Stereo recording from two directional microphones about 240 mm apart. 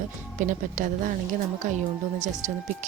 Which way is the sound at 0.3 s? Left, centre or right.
Right.